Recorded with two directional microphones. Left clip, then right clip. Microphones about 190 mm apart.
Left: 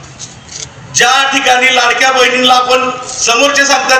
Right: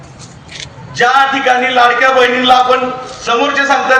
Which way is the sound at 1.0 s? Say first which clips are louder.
Left 1 dB; 30° right (ahead or behind).